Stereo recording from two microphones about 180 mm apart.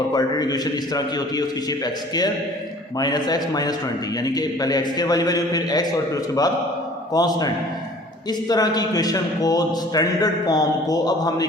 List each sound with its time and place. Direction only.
0.1 s a man's voice: 20° left (ahead or behind)
7.1 s a man's voice: 20° left (ahead or behind)